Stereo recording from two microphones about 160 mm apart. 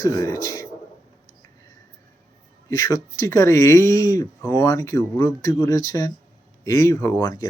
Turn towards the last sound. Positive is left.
turn(degrees=15)  # may be behind; listen again after turning